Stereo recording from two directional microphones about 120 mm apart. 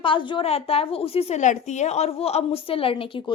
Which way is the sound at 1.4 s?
85° left.